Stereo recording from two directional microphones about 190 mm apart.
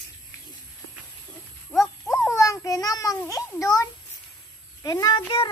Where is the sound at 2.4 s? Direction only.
15° left (ahead or behind).